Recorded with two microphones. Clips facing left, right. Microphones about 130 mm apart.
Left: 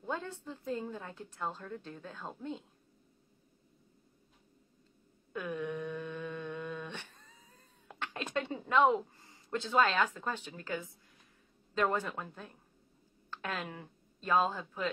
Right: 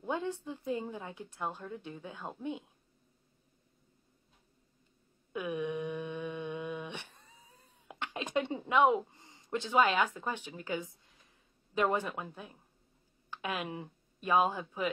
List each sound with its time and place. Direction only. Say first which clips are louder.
0.0 s a woman's voice: right 4 dB; 15° right (ahead or behind)
5.3 s a sound: right 2 dB; 15° right (ahead or behind)
11.7 s a woman's voice: right 1 dB; 15° right (ahead or behind)